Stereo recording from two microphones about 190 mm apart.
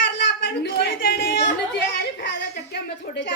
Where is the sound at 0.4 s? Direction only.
60° left (ahead or behind).